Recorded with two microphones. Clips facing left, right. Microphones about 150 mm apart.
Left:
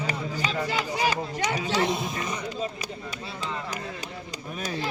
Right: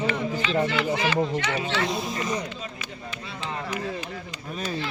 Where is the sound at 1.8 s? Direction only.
20° left (ahead or behind).